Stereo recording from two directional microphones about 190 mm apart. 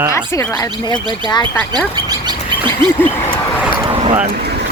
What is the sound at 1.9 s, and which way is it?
Bird, 20° right (ahead or behind).